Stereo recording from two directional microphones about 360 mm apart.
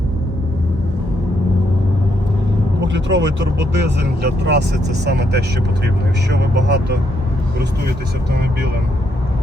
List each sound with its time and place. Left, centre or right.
2.8 s speech: right